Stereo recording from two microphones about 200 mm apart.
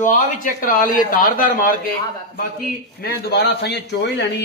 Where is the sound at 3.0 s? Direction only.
50° left (ahead or behind).